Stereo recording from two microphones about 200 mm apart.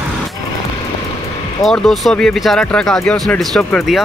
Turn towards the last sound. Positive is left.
turn(degrees=0)  # may be behind; listen again after turning